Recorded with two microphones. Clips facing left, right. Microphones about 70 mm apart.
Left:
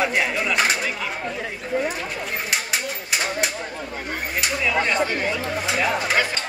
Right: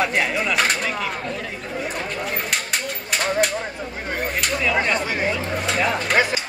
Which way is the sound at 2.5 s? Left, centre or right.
Centre.